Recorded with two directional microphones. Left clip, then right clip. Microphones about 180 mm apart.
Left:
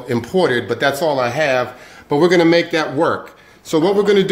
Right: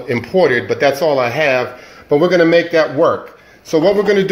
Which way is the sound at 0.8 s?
15° left (ahead or behind).